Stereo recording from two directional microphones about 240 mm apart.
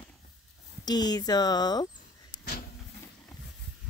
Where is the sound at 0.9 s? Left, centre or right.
Centre.